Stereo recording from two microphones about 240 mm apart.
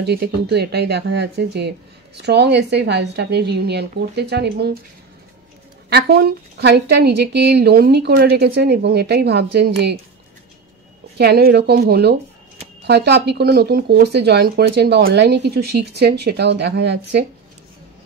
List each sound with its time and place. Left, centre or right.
0.0 s speech: right
5.9 s speech: right
11.1 s speech: right